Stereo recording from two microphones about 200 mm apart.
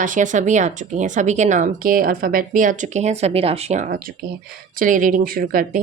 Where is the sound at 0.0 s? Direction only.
40° right (ahead or behind).